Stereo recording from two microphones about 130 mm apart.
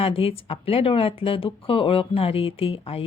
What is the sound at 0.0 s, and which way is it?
Speech, 45° left (ahead or behind).